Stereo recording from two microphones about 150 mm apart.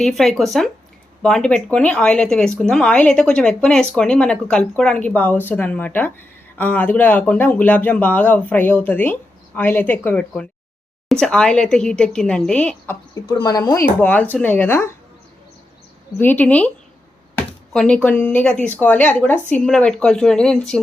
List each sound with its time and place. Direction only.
0.0 s speech: centre (ahead or behind)
13.2 s speech: 25° left (ahead or behind)
14.0 s speech: 10° left (ahead or behind)
16.1 s speech: 10° left (ahead or behind)